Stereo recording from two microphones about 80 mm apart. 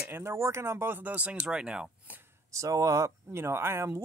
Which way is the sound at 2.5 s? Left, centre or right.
Right.